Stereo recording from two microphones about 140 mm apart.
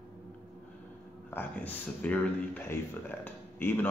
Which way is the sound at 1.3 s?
10° left (ahead or behind).